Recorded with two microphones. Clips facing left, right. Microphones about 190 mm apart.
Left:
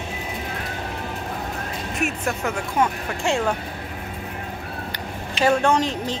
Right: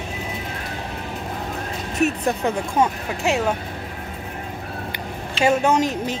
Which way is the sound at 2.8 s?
20° right (ahead or behind).